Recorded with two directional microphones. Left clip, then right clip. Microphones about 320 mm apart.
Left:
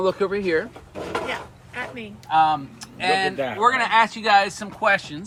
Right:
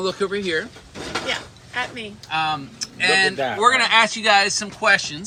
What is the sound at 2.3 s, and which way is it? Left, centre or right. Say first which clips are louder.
Speech: left 5 dB; centre.